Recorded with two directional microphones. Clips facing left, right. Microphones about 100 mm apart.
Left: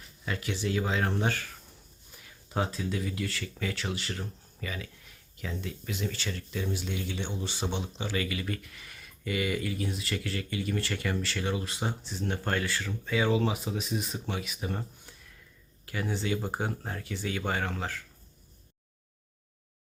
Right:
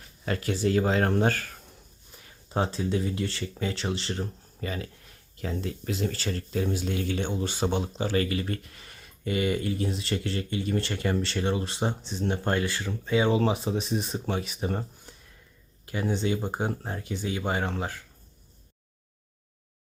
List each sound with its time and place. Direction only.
0.3 s speech: 45° right (ahead or behind)
2.5 s speech: 30° right (ahead or behind)
15.9 s speech: 20° right (ahead or behind)